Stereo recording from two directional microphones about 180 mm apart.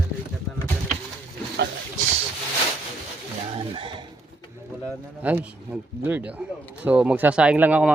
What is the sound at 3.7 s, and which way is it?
Speech, 30° right (ahead or behind).